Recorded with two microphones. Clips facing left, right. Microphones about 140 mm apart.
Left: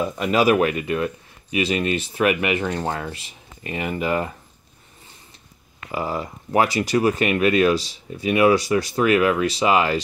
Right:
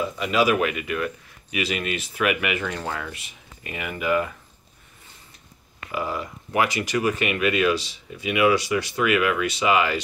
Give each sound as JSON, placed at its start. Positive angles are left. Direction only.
{"t": 0.2, "sound": "speech", "side_deg": 45}
{"t": 5.9, "sound": "speech", "side_deg": 35}